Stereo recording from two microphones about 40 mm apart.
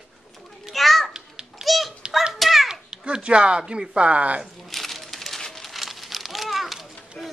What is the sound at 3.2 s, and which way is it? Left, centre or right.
Speech, right.